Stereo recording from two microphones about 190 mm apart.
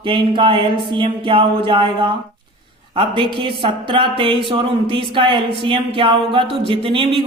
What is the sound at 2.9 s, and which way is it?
Speech, 30° right (ahead or behind).